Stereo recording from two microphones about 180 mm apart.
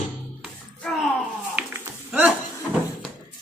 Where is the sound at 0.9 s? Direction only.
Centre (ahead or behind).